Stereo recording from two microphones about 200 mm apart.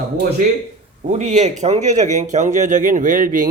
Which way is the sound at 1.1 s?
35° right (ahead or behind).